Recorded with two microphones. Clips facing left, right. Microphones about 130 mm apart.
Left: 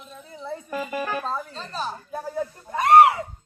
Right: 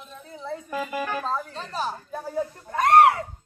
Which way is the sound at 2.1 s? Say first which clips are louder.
Even; 5° left (ahead or behind).